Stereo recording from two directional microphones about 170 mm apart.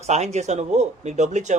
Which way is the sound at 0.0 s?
40° right (ahead or behind).